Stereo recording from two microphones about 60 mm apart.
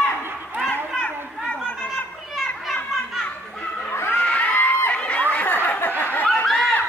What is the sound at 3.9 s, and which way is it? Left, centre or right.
Crowd, left.